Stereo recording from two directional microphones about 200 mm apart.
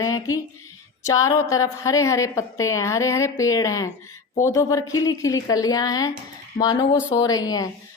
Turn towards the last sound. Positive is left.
turn(degrees=20)  # may be behind; listen again after turning